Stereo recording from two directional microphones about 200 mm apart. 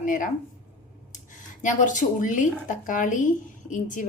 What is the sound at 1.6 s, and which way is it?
A woman's voice, 40° left (ahead or behind).